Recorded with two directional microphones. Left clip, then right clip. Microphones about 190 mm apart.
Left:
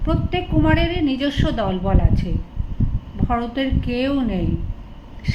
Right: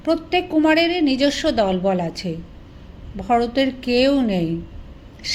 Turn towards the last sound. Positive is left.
turn(degrees=-45)  # may be behind; listen again after turning